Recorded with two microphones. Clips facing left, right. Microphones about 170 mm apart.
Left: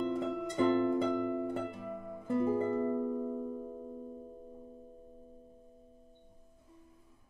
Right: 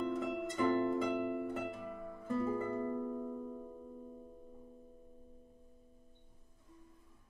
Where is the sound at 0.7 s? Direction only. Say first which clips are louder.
Left 3 dB; 20° left (ahead or behind).